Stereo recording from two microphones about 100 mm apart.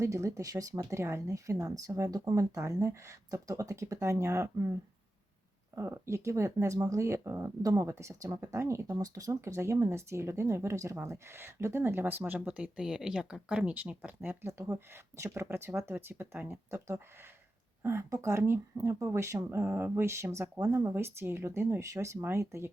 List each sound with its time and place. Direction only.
0.0 s speech: 30° right (ahead or behind)
5.7 s speech: 30° right (ahead or behind)